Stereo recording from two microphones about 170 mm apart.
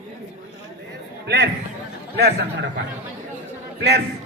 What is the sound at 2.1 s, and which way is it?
Speech, 70° right (ahead or behind).